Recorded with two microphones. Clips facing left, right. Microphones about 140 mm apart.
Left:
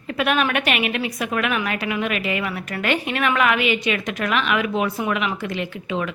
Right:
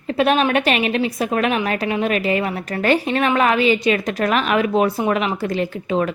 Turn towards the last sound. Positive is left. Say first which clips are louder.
# right 6 dB
turn(degrees=-40)  # may be behind; listen again after turning